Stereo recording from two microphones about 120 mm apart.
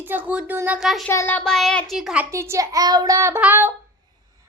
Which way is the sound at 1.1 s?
20° left (ahead or behind).